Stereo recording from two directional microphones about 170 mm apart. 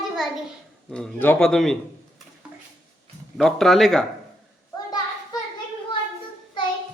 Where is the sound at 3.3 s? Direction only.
Centre (ahead or behind).